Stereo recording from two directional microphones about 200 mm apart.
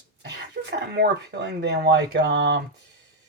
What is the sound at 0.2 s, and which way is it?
Speech, 55° right (ahead or behind).